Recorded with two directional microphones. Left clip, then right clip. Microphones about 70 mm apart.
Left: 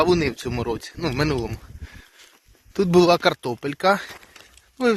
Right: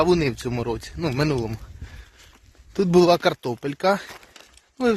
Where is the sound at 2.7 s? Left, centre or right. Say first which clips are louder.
Even; right.